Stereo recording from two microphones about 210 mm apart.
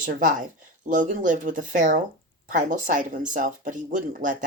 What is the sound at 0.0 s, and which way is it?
Speech, 40° right (ahead or behind).